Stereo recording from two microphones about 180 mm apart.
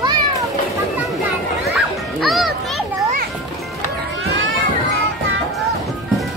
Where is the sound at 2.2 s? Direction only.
Centre (ahead or behind).